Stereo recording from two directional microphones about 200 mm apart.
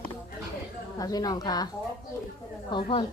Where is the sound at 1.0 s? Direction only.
20° left (ahead or behind).